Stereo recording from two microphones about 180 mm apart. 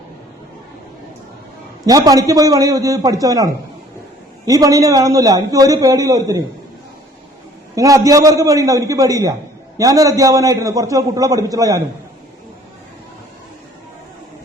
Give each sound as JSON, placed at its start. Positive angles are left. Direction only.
{"t": 1.8, "sound": "a man's voice", "side_deg": -20}
{"t": 7.8, "sound": "a man's voice", "side_deg": -20}